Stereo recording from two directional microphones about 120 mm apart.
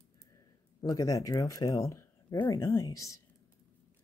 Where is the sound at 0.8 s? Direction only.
30° left (ahead or behind).